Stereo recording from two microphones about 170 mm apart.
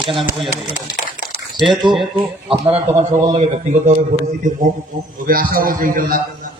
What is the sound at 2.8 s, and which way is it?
Speech, 15° right (ahead or behind).